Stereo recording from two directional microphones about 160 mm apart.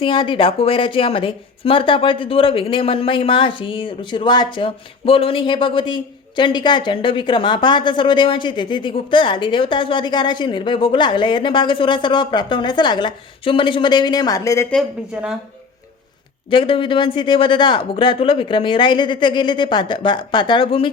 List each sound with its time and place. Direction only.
0.0 s speech: 30° left (ahead or behind)
16.5 s speech: 35° left (ahead or behind)